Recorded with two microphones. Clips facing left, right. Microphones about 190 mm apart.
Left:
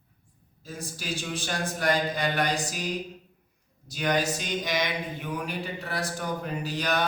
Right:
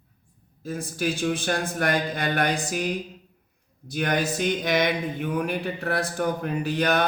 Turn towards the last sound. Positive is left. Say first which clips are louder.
# right 5 dB
turn(degrees=-55)  # may be behind; listen again after turning